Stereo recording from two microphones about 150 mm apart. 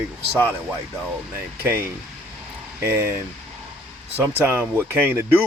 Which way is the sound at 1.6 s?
15° right (ahead or behind).